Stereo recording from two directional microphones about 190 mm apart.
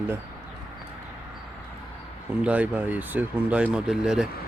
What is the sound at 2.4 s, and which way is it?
Speech, 5° right (ahead or behind).